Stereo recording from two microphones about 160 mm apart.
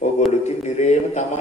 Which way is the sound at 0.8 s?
45° left (ahead or behind).